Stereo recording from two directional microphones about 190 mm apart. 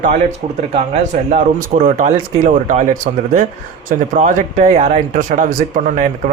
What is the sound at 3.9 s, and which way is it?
Speech, 40° right (ahead or behind).